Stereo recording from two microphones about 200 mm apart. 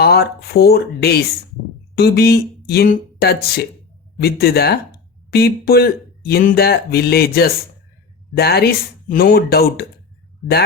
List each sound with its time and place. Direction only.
0.0 s speech: 50° left (ahead or behind)